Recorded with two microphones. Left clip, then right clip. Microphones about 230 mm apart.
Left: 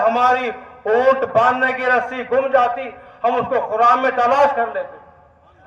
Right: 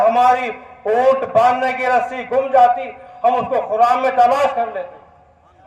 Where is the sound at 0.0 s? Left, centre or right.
Right.